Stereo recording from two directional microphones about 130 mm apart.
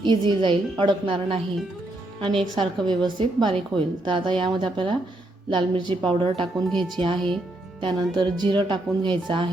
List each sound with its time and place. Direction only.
0.0 s a woman's voice: 35° right (ahead or behind)
2.6 s a woman's voice: 35° right (ahead or behind)
6.7 s speech: 5° left (ahead or behind)
6.9 s a woman's voice: 40° right (ahead or behind)